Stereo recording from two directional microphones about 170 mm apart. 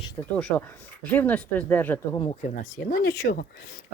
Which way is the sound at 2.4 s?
50° left (ahead or behind).